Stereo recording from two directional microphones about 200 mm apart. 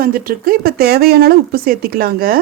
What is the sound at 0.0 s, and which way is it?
Speech, 45° right (ahead or behind).